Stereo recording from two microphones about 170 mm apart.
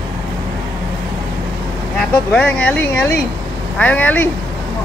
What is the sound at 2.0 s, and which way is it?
Speech, 10° left (ahead or behind).